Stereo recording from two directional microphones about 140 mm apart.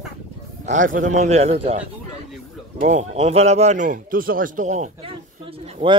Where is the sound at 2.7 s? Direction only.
60° right (ahead or behind).